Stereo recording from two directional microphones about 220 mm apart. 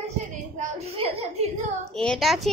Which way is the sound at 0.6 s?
30° right (ahead or behind).